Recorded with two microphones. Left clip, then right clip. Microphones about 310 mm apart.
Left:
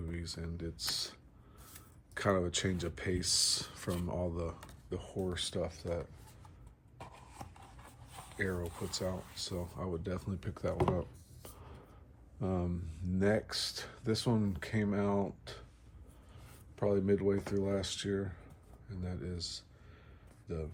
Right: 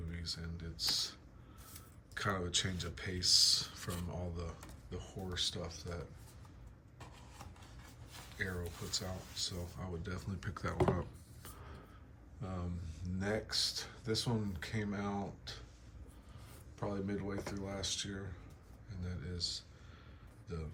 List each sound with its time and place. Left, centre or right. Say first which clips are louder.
0.1 s speech: right 3 dB; left
8.1 s speech: left 4 dB; left; by 11.0 s centre
12.4 s speech: left 9 dB; centre
16.7 s speech: left 10 dB; left